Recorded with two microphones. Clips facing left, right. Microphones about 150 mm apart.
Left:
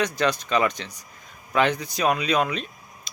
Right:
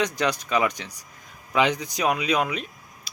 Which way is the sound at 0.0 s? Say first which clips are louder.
Left 1 dB; 15° right (ahead or behind).